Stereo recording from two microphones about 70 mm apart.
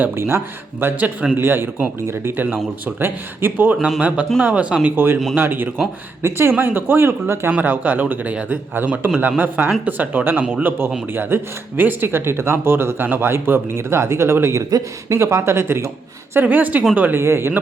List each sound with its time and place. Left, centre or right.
0.0 s speech: right
3.8 s speech: centre
4.4 s speech: centre; by 14.6 s right
14.6 s speech: right
16.3 s speech: right
17.2 s speech: right